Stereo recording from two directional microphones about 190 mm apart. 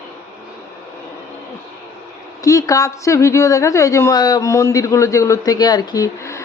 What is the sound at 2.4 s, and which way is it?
Speech, 15° left (ahead or behind).